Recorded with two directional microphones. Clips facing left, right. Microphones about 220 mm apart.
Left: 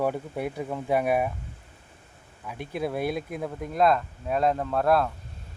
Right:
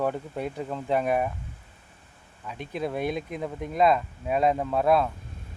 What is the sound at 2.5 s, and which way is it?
Speech, 10° left (ahead or behind).